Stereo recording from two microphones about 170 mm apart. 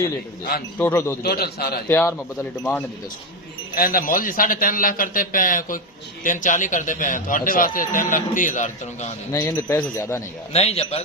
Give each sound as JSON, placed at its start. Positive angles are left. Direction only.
{"t": 0.8, "sound": "speech", "side_deg": 15}
{"t": 1.2, "sound": "a man's voice", "side_deg": 65}
{"t": 1.9, "sound": "speech", "side_deg": 10}
{"t": 3.8, "sound": "a man's voice", "side_deg": 55}
{"t": 9.3, "sound": "speech", "side_deg": 15}
{"t": 10.5, "sound": "a man's voice", "side_deg": 40}